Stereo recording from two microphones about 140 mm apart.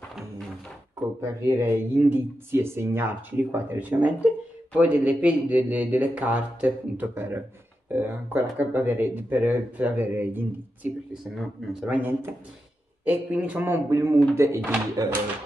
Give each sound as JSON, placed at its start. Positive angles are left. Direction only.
{"t": 1.4, "sound": "speech", "side_deg": -15}